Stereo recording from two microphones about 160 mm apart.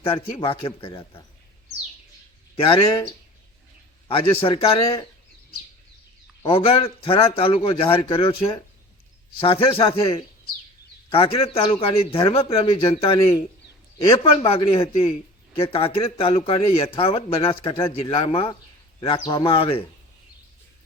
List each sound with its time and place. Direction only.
0.3 s a man's voice: 35° left (ahead or behind)
2.6 s a man's voice: 35° left (ahead or behind)
6.4 s a man's voice: 35° left (ahead or behind)
11.1 s a man's voice: 35° left (ahead or behind)
14.3 s a man's voice: 35° left (ahead or behind)